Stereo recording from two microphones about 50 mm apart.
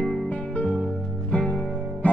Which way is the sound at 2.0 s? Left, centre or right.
Left.